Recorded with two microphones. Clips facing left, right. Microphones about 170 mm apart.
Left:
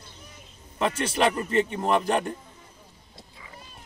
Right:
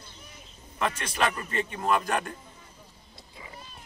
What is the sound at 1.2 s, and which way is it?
Speech, 25° left (ahead or behind).